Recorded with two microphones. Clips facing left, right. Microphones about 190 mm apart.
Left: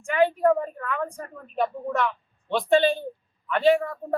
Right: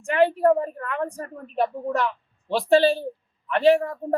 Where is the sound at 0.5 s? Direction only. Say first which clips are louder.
Right 2 dB; 35° right (ahead or behind).